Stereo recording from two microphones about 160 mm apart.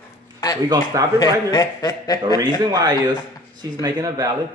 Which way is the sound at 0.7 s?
20° right (ahead or behind).